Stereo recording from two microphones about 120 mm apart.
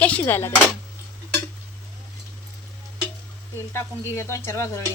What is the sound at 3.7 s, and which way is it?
Speech, 20° left (ahead or behind).